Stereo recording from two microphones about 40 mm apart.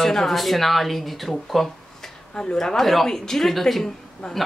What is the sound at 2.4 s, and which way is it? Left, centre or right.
A woman's voice, centre.